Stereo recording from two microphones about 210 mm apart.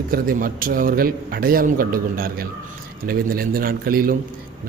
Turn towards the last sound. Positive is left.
turn(degrees=-45)  # may be behind; listen again after turning